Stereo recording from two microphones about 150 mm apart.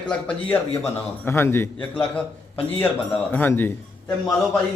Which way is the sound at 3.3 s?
15° left (ahead or behind).